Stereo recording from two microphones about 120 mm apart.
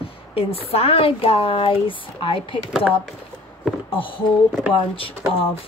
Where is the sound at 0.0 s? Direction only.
50° left (ahead or behind).